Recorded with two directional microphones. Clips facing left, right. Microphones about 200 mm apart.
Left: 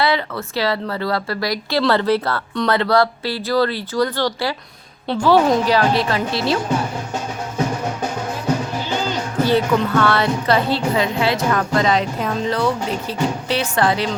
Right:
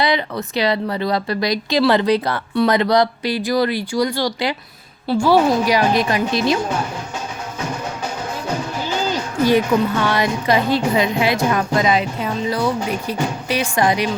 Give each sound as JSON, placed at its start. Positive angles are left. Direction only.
{"t": 0.0, "sound": "speech", "side_deg": -15}
{"t": 9.5, "sound": "speech", "side_deg": -15}